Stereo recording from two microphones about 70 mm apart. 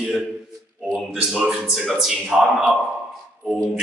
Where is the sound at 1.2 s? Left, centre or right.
Centre.